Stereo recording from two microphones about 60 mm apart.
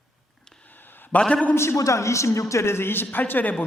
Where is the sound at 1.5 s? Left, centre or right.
Left.